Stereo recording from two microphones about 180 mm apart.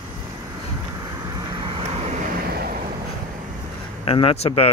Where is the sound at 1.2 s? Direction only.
25° right (ahead or behind).